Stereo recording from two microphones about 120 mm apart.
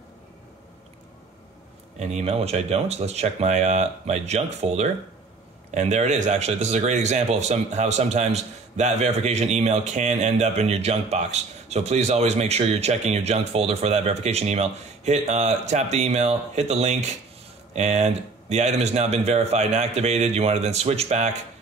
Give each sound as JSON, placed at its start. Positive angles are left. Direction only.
{"t": 2.0, "sound": "a man's voice", "side_deg": -65}
{"t": 5.8, "sound": "a man's voice", "side_deg": -75}